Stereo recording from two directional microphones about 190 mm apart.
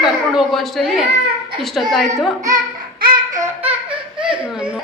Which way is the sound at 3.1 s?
15° right (ahead or behind).